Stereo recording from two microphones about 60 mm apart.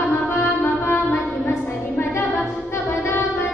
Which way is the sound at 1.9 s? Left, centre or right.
Left.